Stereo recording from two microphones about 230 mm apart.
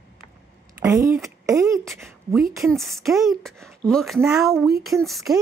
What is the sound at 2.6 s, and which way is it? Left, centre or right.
Speech, centre.